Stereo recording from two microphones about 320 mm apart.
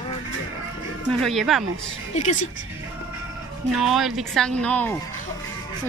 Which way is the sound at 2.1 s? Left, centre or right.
Left.